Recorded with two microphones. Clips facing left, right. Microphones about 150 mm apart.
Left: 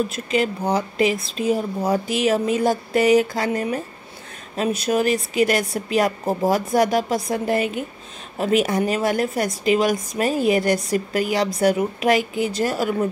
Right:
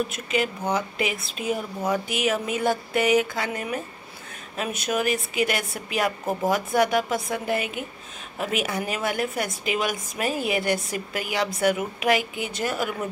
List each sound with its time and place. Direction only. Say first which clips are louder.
0.1 s a woman's voice: left 4 dB; 35° left (ahead or behind)